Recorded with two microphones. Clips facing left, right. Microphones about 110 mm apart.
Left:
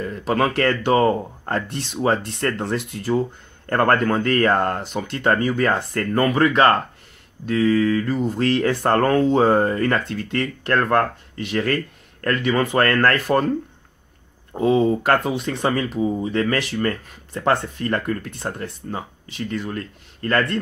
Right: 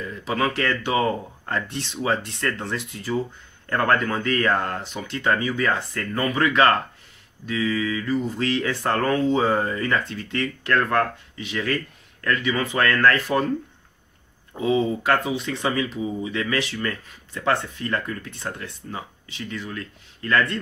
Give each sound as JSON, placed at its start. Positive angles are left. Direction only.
{"t": 0.0, "sound": "speech", "side_deg": 50}
{"t": 7.4, "sound": "speech", "side_deg": 50}
{"t": 11.3, "sound": "speech", "side_deg": 50}
{"t": 14.6, "sound": "speech", "side_deg": 50}